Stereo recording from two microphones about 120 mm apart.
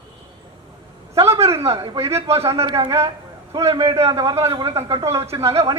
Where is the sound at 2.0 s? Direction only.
25° right (ahead or behind).